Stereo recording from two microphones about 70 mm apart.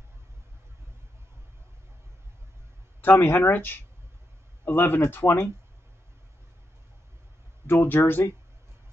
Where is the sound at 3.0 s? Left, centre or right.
Left.